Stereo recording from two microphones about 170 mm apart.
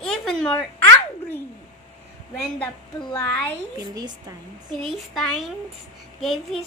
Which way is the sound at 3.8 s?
25° right (ahead or behind).